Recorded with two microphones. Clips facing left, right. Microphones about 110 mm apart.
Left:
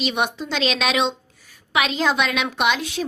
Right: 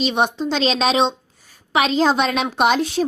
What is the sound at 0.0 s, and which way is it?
Speech, 30° right (ahead or behind).